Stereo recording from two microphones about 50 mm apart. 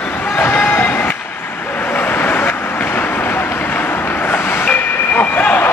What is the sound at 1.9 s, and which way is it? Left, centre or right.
Vehicle, left.